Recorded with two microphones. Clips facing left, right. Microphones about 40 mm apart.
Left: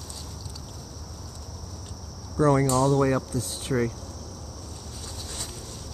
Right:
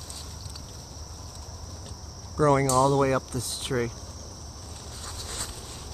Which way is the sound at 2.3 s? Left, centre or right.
Centre.